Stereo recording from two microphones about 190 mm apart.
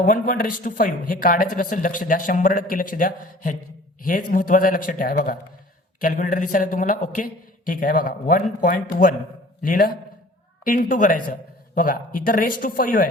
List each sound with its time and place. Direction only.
0.0 s speech: 45° left (ahead or behind)